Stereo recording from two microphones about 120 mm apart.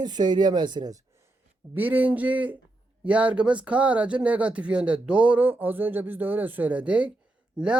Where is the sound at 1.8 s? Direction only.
15° right (ahead or behind).